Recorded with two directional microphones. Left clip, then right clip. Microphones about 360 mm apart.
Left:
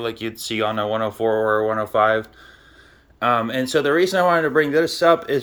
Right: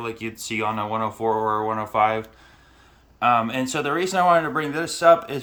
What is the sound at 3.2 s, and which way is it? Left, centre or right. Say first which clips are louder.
Speech: even; centre.